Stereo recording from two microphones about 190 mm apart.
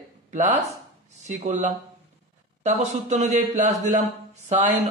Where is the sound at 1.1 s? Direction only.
35° right (ahead or behind).